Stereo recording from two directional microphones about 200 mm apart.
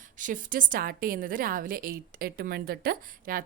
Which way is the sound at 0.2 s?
40° right (ahead or behind).